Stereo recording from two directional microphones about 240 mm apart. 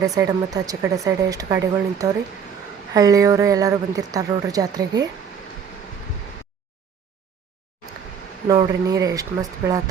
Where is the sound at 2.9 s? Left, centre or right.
Centre.